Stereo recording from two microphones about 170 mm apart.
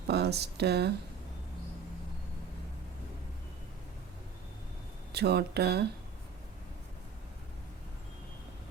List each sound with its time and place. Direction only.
0.1 s speech: 75° right (ahead or behind)
5.1 s speech: 75° right (ahead or behind)